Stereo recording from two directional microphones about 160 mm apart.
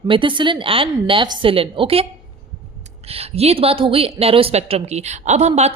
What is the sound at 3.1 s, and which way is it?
Speech, 40° right (ahead or behind).